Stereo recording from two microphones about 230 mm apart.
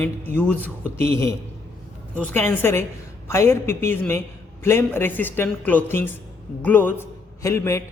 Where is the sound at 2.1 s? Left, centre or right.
Centre.